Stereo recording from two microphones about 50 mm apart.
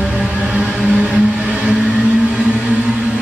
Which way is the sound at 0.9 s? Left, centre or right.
Right.